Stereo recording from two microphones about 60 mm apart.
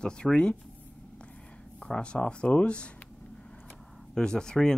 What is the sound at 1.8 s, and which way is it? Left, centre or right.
Speech, centre.